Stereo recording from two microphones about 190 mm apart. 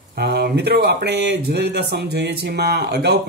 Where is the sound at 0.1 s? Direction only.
55° right (ahead or behind).